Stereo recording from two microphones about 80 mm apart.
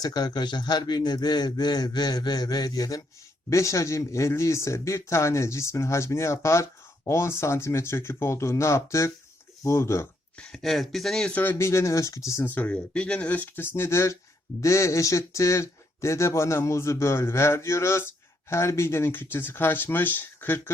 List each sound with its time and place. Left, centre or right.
0.0 s a man's voice: left
3.5 s speech: left
10.3 s speech: centre
11.3 s speech: left
11.5 s speech: left
12.5 s speech: left